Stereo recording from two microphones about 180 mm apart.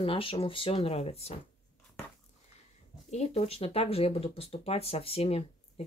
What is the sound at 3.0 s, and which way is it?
Speech, 35° left (ahead or behind).